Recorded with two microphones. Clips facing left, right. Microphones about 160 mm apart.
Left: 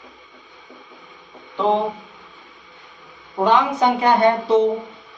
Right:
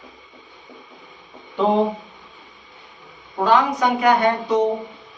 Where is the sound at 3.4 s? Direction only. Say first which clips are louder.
Left 1 dB; 25° left (ahead or behind).